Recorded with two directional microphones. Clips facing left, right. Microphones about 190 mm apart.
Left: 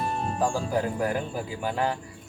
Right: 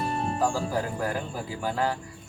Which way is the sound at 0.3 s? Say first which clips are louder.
Left 2 dB; 20° left (ahead or behind).